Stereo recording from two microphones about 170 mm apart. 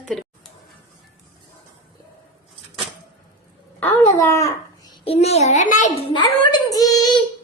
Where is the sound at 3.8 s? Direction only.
15° left (ahead or behind).